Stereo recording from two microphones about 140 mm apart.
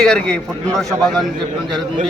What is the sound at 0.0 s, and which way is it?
Speech, 5° left (ahead or behind).